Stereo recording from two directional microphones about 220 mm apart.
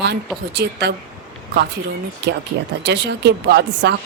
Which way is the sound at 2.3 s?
50° right (ahead or behind).